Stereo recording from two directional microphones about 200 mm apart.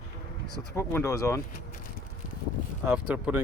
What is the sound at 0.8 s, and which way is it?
Speech, 15° left (ahead or behind).